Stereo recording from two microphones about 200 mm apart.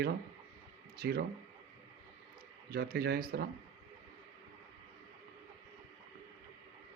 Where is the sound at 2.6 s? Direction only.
50° right (ahead or behind).